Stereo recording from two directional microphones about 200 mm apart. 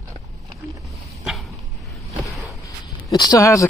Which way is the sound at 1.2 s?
Centre (ahead or behind).